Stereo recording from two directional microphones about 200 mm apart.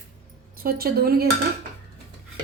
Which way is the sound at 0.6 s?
50° right (ahead or behind).